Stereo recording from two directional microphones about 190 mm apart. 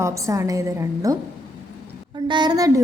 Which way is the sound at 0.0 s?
15° right (ahead or behind).